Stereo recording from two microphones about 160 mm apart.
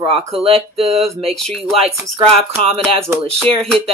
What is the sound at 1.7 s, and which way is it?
Speech, 35° right (ahead or behind).